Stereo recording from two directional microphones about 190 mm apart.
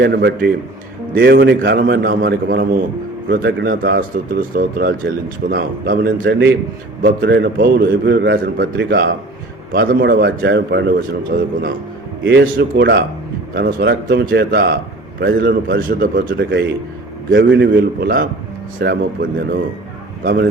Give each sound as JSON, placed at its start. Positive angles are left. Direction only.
{"t": 0.0, "sound": "a man's voice", "side_deg": -60}
{"t": 1.8, "sound": "a man's voice", "side_deg": -50}
{"t": 10.0, "sound": "a man's voice", "side_deg": -60}
{"t": 12.2, "sound": "a man's voice", "side_deg": -70}
{"t": 13.5, "sound": "a man's voice", "side_deg": -50}
{"t": 17.3, "sound": "a man's voice", "side_deg": -70}